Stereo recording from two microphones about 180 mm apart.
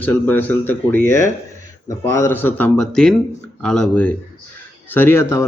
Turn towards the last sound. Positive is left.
turn(degrees=15)  # may be behind; listen again after turning